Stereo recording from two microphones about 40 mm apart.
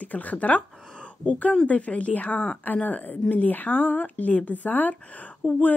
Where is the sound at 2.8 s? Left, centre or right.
Left.